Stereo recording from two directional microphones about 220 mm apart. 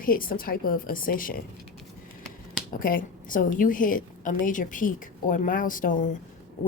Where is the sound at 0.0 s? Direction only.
40° left (ahead or behind).